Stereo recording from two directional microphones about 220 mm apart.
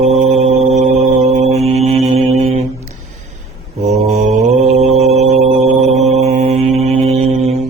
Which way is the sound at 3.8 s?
30° right (ahead or behind).